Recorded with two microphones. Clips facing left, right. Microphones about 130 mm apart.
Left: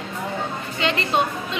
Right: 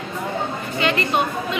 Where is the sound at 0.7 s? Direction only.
25° left (ahead or behind).